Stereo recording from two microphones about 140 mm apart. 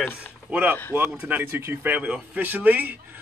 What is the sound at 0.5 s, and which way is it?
Speech, 10° right (ahead or behind).